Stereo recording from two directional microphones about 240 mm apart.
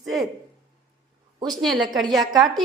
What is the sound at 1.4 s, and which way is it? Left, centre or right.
Speech, centre.